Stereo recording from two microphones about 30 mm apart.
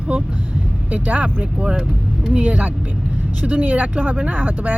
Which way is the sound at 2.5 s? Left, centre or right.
Right.